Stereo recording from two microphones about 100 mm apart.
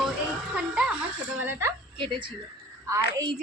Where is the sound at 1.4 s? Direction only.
25° right (ahead or behind).